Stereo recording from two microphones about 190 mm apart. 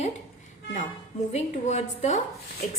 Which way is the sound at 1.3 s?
35° left (ahead or behind).